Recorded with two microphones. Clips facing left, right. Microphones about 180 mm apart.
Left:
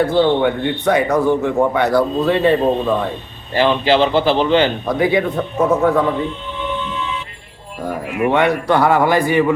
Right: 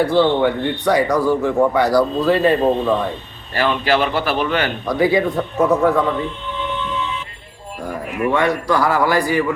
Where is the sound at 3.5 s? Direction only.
25° left (ahead or behind).